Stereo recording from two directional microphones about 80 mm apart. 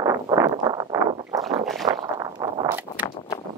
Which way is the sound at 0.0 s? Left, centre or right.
Right.